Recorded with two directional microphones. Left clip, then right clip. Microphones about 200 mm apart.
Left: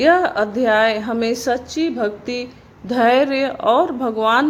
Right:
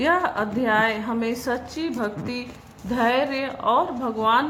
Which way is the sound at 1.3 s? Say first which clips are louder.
Left 7 dB; 35° left (ahead or behind).